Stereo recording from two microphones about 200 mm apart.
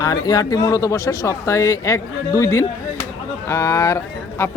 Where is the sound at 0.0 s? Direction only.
20° left (ahead or behind).